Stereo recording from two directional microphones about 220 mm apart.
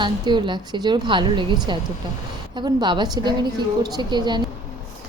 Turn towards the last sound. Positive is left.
turn(degrees=-20)  # may be behind; listen again after turning